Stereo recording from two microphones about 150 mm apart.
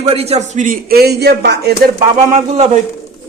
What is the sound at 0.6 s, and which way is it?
Speech, 80° right.